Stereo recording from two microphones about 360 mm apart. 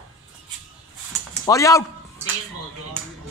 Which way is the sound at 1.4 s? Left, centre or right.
Centre.